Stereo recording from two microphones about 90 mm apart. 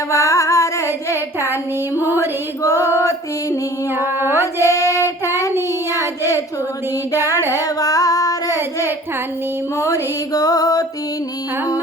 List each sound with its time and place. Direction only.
0.1 s music: 35° left (ahead or behind)
2.0 s music: 30° left (ahead or behind)
3.9 s female singing: 25° right (ahead or behind)
4.6 s child singing: 35° left (ahead or behind)
7.1 s female singing: 40° left (ahead or behind)
9.7 s music: 35° left (ahead or behind)